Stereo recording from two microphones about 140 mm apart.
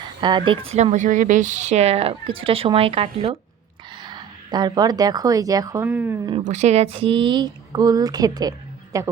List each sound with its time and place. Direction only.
0.2 s a woman's voice: 35° right (ahead or behind)
5.8 s speech: 15° right (ahead or behind)
6.4 s speech: 55° right (ahead or behind); by 9.0 s 25° right (ahead or behind)